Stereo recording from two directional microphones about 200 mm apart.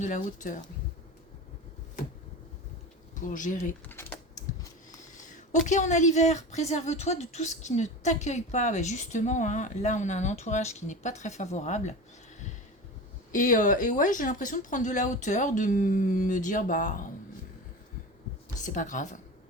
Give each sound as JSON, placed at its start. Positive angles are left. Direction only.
{"t": 0.0, "sound": "speech", "side_deg": 40}
{"t": 3.2, "sound": "speech", "side_deg": 40}
{"t": 3.8, "sound": "typing", "side_deg": 10}
{"t": 5.6, "sound": "speech", "side_deg": 35}
{"t": 13.3, "sound": "speech", "side_deg": 40}
{"t": 18.6, "sound": "speech", "side_deg": 40}